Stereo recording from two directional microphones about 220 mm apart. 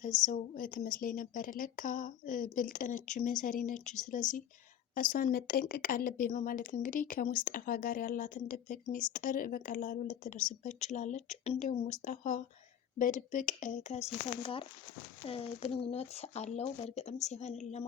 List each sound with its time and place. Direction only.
0.0 s a woman's voice: 35° left (ahead or behind)